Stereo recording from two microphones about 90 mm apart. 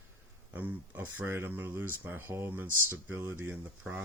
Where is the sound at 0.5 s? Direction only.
20° right (ahead or behind).